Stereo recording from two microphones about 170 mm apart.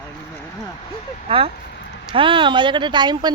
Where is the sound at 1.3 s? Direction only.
35° right (ahead or behind).